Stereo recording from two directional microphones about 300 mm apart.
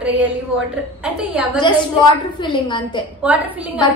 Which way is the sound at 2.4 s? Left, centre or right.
Centre.